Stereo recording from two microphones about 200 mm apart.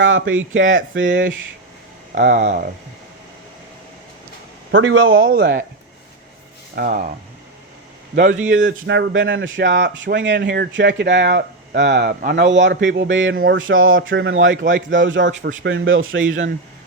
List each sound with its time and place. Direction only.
0.0 s speech: 75° right (ahead or behind)
2.1 s speech: 40° right (ahead or behind)
4.7 s speech: 75° right (ahead or behind)
5.2 s speech: 50° right (ahead or behind)
6.7 s speech: 45° right (ahead or behind)
8.1 s speech: 60° right (ahead or behind)
13.3 s speech: 50° right (ahead or behind)
13.6 s speech: 80° right
15.3 s speech: 40° right (ahead or behind)
15.6 s speech: 75° right (ahead or behind)